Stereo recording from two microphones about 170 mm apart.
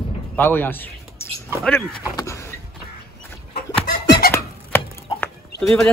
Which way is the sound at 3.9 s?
60° left (ahead or behind).